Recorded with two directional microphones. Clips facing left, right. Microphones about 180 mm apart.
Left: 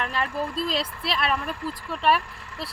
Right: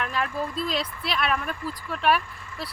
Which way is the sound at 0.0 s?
Centre (ahead or behind).